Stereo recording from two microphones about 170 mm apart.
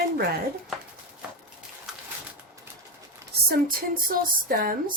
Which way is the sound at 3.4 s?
60° right (ahead or behind).